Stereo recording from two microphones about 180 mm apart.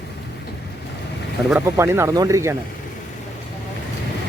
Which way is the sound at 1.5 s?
15° right (ahead or behind).